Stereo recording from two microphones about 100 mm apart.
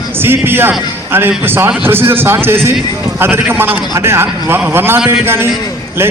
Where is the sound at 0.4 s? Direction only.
20° right (ahead or behind).